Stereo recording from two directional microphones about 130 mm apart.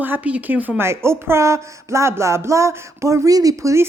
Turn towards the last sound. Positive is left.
turn(degrees=-25)  # may be behind; listen again after turning